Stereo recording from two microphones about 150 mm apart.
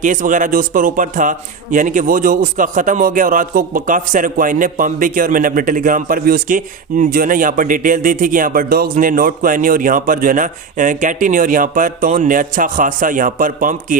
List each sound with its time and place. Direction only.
0.0 s a man's voice: 60° right (ahead or behind)